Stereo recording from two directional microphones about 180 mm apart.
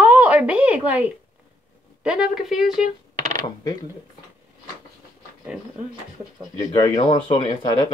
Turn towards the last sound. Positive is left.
turn(degrees=25)  # may be behind; listen again after turning